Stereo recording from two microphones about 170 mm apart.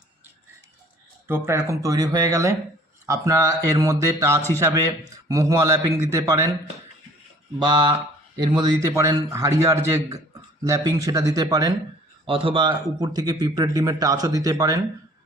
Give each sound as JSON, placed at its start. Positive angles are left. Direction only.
{"t": 1.3, "sound": "speech", "side_deg": -15}
{"t": 7.6, "sound": "speech", "side_deg": -25}
{"t": 12.2, "sound": "speech", "side_deg": -30}